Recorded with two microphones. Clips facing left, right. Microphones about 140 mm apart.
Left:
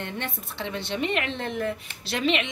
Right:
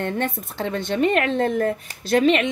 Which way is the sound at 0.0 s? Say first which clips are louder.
Right 9 dB; 45° right (ahead or behind).